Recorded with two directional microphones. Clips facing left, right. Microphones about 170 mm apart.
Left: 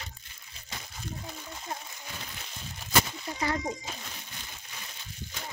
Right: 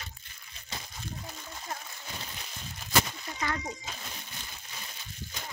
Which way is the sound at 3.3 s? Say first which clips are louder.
Left 4 dB; 30° left (ahead or behind).